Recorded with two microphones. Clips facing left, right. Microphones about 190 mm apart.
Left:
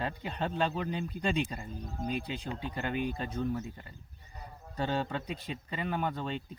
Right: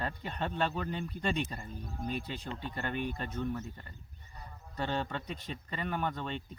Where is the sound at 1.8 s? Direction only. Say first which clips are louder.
Left 2 dB; 40° left (ahead or behind).